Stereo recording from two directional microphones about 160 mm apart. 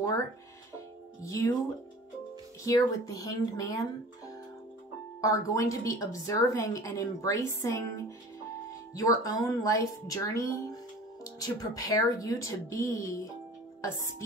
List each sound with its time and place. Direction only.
1.2 s a woman's voice: 20° left (ahead or behind)
2.6 s a woman's voice: 20° left (ahead or behind)
5.2 s a woman's voice: 20° left (ahead or behind)